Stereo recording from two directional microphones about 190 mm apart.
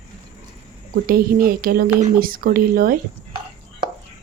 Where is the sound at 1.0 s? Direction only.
50° right (ahead or behind).